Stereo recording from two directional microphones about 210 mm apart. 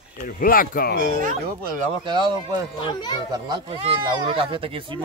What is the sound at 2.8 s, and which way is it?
Speech, 20° left (ahead or behind).